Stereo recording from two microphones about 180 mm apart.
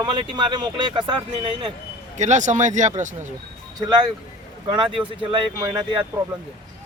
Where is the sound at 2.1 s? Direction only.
40° right (ahead or behind).